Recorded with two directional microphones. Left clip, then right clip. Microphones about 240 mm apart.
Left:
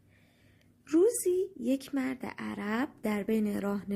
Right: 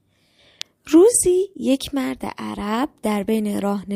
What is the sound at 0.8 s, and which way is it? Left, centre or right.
Speech, right.